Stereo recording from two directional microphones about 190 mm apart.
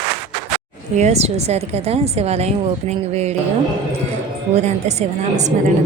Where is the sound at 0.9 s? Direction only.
35° right (ahead or behind).